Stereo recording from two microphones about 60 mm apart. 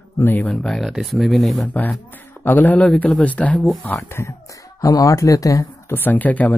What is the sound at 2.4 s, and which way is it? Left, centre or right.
Speech, left.